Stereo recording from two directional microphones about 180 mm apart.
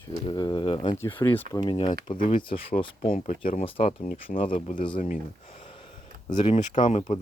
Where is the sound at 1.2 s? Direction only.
10° left (ahead or behind).